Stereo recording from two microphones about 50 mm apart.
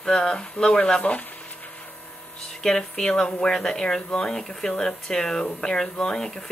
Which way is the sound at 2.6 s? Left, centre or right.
Centre.